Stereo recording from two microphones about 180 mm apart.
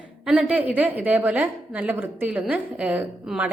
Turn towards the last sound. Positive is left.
turn(degrees=-5)  # may be behind; listen again after turning